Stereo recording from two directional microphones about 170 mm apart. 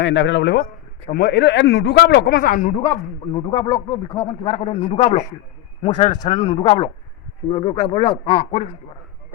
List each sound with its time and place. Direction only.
0.0 s a man's voice: 90° left; by 2.8 s 50° left (ahead or behind)
3.3 s speech: 30° left (ahead or behind)
5.9 s speech: 25° left (ahead or behind)
6.4 s speech: 40° left (ahead or behind)